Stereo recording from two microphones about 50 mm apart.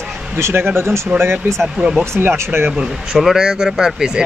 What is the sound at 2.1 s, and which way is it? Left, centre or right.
Speech, right.